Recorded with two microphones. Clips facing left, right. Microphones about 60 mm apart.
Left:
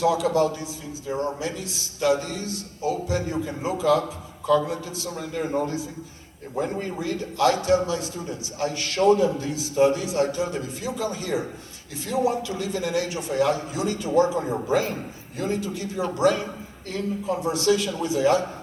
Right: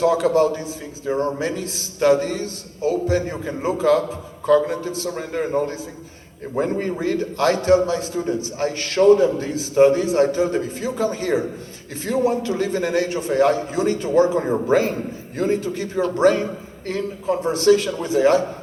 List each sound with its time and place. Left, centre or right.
0.0 s a man's voice: right